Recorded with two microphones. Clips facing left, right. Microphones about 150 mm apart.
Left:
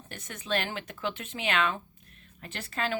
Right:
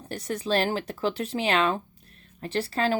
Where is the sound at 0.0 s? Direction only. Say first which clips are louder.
Right 12 dB; 35° right (ahead or behind).